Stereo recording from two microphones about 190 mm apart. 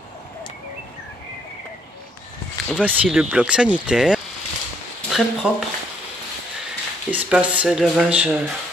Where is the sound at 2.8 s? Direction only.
5° right (ahead or behind).